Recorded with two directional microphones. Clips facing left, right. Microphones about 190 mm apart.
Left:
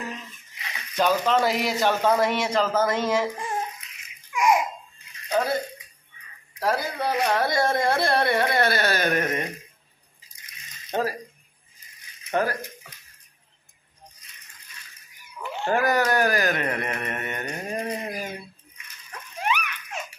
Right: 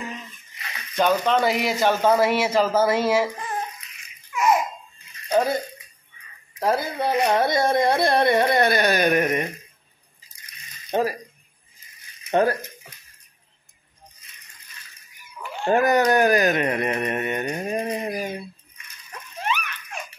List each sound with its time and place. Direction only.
0.9 s speech: centre (ahead or behind)
4.3 s babbling: 15° left (ahead or behind)
5.4 s a sound: 20° right (ahead or behind)
6.6 s speech: 20° right (ahead or behind)
10.9 s speech: 15° right (ahead or behind)
12.3 s speech: 25° right (ahead or behind)
15.6 s speech: 20° right (ahead or behind)
19.4 s giggle: 15° left (ahead or behind)